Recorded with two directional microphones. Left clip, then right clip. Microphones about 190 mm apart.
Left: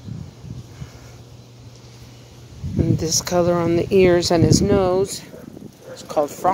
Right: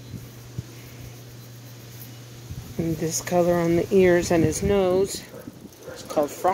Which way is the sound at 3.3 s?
20° left (ahead or behind).